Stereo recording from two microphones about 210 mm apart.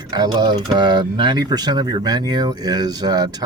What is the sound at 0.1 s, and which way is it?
Speech, 20° right (ahead or behind).